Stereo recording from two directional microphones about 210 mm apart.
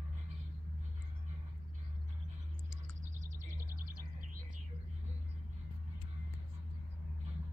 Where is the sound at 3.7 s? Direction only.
45° right (ahead or behind).